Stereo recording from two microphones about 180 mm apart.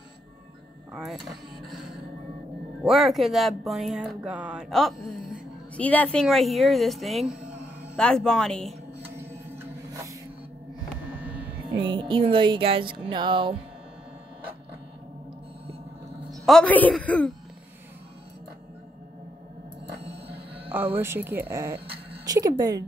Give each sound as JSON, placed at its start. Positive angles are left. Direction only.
{"t": 0.9, "sound": "speech", "side_deg": 0}
{"t": 9.0, "sound": "a sound", "side_deg": -10}
{"t": 11.1, "sound": "a sound", "side_deg": -5}
{"t": 11.7, "sound": "speech", "side_deg": -25}
{"t": 16.3, "sound": "a woman's voice", "side_deg": 0}
{"t": 20.0, "sound": "music", "side_deg": -65}
{"t": 20.6, "sound": "a woman's voice", "side_deg": -10}
{"t": 21.7, "sound": "a sound", "side_deg": -60}
{"t": 22.2, "sound": "speech", "side_deg": -20}